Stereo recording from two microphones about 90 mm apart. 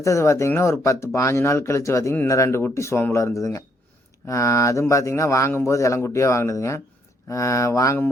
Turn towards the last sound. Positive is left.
turn(degrees=35)  # may be behind; listen again after turning